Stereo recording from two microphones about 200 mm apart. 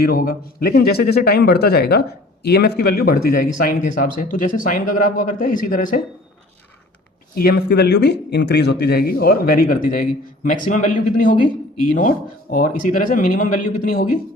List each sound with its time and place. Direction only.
0.0 s a man's voice: 45° left (ahead or behind)
7.3 s a man's voice: 50° left (ahead or behind)